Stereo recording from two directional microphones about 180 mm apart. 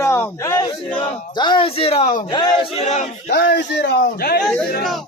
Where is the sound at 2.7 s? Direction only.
40° left (ahead or behind).